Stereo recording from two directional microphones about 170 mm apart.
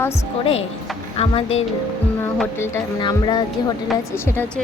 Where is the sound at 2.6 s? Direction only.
15° left (ahead or behind).